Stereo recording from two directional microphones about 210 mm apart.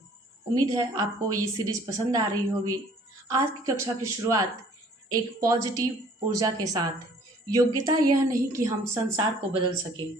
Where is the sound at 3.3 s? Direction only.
15° right (ahead or behind).